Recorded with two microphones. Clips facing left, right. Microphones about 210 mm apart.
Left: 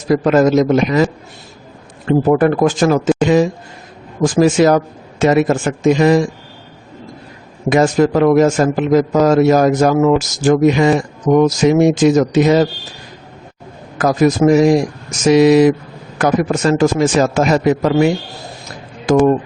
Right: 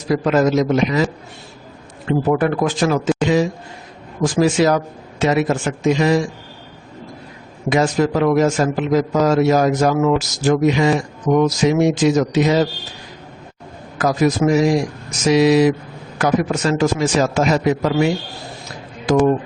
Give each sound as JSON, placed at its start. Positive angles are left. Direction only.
{"t": 0.1, "sound": "a man's voice", "side_deg": 50}
{"t": 2.0, "sound": "a man's voice", "side_deg": 45}
{"t": 7.7, "sound": "a man's voice", "side_deg": 50}
{"t": 14.0, "sound": "a man's voice", "side_deg": 50}